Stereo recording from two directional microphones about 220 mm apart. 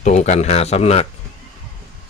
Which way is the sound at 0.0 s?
30° left (ahead or behind).